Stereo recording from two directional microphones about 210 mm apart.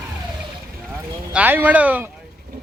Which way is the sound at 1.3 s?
5° right (ahead or behind).